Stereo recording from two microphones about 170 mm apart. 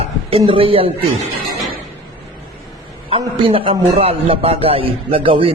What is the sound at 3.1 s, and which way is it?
A man's voice, 30° right (ahead or behind).